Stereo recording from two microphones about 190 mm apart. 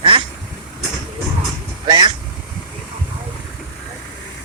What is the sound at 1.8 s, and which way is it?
Vehicle, 25° right (ahead or behind).